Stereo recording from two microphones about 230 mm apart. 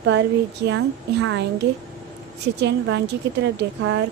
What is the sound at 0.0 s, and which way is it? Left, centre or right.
A woman's voice, right.